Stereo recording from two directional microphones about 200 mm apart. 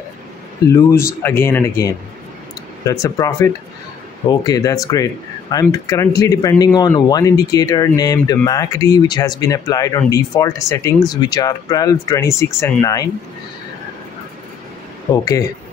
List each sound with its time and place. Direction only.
0.7 s speech: 15° left (ahead or behind)
15.1 s speech: 15° left (ahead or behind)